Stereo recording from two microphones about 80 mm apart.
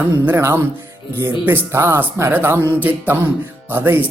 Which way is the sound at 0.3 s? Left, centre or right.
Right.